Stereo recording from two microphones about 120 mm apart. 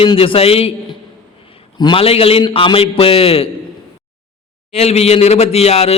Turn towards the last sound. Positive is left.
turn(degrees=60)  # may be behind; listen again after turning